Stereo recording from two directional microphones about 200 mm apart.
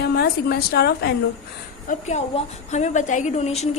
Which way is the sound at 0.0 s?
50° left (ahead or behind).